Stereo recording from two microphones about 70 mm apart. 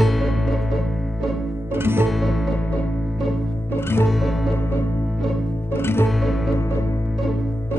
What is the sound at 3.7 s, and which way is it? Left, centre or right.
Music, left.